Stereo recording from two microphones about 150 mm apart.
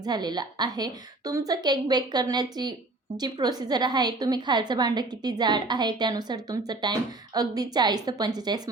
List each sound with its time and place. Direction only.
0.0 s a woman's voice: 25° right (ahead or behind)